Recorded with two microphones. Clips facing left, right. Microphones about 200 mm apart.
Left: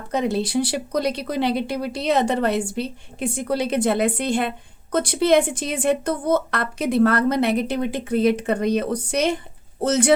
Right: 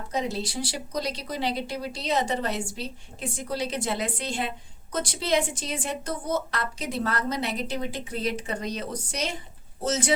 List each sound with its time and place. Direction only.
0.1 s speech: 60° left (ahead or behind)